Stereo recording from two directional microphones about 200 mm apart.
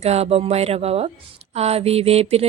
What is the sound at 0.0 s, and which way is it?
Speech, 30° right (ahead or behind).